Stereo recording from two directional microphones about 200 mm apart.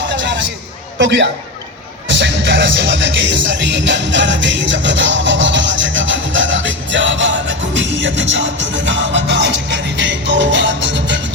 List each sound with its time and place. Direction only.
0.0 s a sound: 60° right (ahead or behind)
0.9 s a man's voice: 65° right (ahead or behind)
2.0 s music: 65° right (ahead or behind)